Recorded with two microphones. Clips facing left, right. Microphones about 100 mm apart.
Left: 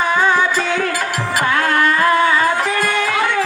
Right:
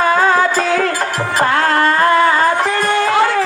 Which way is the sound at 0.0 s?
50° right (ahead or behind).